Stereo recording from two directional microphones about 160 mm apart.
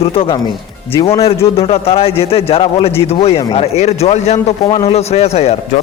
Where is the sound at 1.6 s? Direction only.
40° left (ahead or behind).